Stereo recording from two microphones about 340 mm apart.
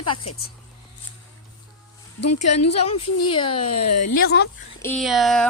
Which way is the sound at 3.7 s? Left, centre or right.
Left.